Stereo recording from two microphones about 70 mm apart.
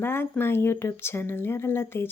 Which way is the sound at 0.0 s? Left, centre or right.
Left.